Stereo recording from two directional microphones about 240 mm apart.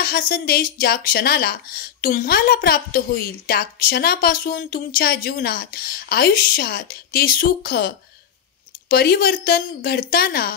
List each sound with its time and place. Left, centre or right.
0.0 s speech: left